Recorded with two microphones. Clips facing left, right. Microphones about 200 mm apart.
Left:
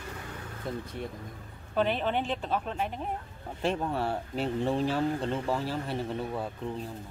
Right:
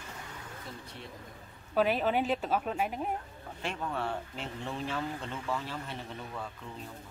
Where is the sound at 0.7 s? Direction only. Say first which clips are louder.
Left 12 dB; 50° left (ahead or behind).